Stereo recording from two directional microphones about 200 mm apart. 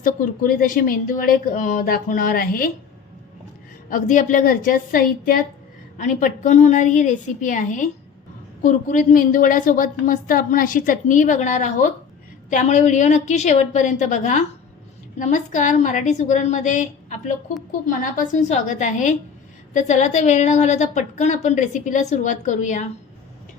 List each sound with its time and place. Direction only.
0.0 s speech: 45° left (ahead or behind)
3.8 s a woman's voice: 40° left (ahead or behind)